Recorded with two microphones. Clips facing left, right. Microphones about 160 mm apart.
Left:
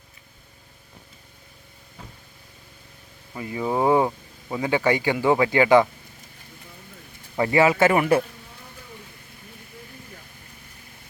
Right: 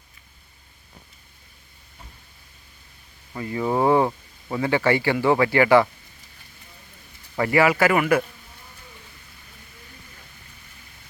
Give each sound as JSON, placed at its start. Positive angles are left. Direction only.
{"t": 3.3, "sound": "speech", "side_deg": 15}
{"t": 7.3, "sound": "speech", "side_deg": 20}